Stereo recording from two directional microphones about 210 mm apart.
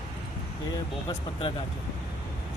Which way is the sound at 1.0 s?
25° left (ahead or behind).